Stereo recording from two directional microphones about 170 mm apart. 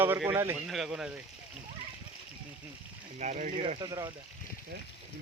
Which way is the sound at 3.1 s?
45° right (ahead or behind).